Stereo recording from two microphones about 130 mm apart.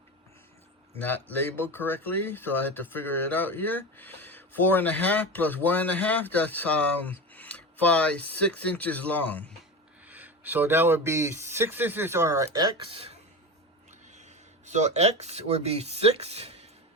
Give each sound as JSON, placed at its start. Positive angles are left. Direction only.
{"t": 0.9, "sound": "speech", "side_deg": 15}
{"t": 10.1, "sound": "speech", "side_deg": -15}
{"t": 12.5, "sound": "speech", "side_deg": -40}
{"t": 14.1, "sound": "speech", "side_deg": -65}